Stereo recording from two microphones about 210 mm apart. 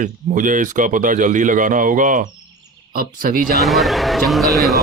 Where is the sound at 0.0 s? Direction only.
40° right (ahead or behind).